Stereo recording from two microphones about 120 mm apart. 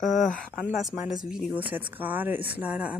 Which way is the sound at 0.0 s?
90° left.